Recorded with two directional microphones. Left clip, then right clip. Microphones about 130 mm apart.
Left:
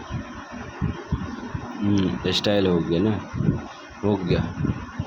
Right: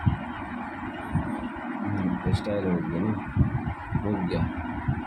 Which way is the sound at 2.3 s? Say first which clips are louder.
Left 12 dB; 80° left.